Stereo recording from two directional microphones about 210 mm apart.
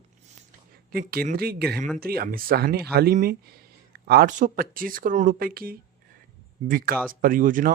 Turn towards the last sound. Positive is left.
turn(degrees=-40)  # may be behind; listen again after turning